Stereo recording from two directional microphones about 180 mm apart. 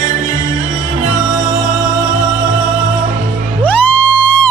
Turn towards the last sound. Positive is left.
turn(degrees=10)  # may be behind; listen again after turning